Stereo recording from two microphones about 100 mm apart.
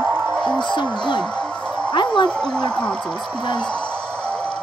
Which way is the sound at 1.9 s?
50° left (ahead or behind).